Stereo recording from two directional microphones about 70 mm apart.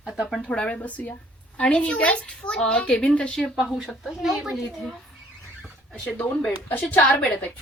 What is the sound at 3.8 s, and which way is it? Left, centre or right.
Speech, centre.